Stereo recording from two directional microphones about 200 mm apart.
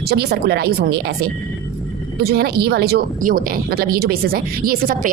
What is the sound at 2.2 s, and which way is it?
Speech, 50° right (ahead or behind).